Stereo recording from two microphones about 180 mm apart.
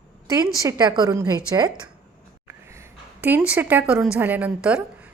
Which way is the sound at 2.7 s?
15° right (ahead or behind).